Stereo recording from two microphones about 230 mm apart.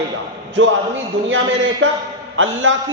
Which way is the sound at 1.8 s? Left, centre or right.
Right.